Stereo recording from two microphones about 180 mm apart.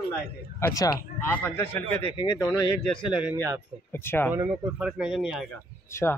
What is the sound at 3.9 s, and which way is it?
Speech, 10° left (ahead or behind).